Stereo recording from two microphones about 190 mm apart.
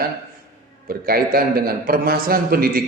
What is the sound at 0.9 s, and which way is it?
A man's voice, 50° right (ahead or behind).